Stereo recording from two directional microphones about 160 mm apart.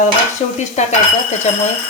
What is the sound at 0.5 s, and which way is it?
Stir, 45° left (ahead or behind).